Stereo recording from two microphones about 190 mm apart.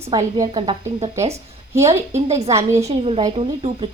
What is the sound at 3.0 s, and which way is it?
Speech, 30° right (ahead or behind).